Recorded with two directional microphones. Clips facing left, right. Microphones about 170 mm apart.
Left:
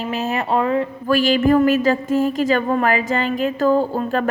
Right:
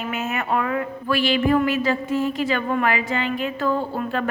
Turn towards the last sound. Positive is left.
turn(degrees=40)  # may be behind; listen again after turning